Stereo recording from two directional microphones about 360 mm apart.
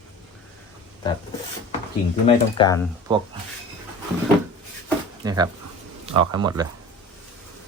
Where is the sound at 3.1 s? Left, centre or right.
Centre.